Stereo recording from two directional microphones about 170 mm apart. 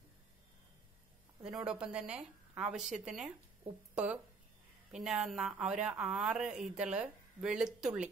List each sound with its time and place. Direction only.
1.4 s speech: 5° right (ahead or behind)